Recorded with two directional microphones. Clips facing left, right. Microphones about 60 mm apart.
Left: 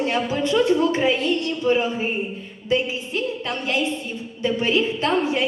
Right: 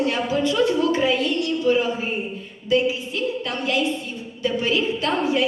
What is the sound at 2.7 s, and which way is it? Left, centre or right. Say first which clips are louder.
A woman's voice: right 2 dB; left.